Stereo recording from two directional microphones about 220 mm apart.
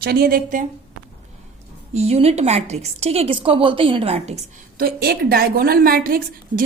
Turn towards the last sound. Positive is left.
turn(degrees=-40)  # may be behind; listen again after turning